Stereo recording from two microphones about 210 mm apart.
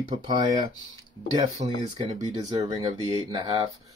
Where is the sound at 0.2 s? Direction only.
20° right (ahead or behind).